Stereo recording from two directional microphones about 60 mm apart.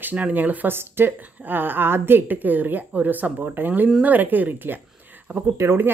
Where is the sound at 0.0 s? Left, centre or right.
Right.